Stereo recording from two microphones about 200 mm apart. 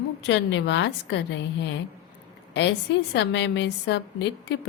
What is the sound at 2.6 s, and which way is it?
A woman's voice, 60° left (ahead or behind).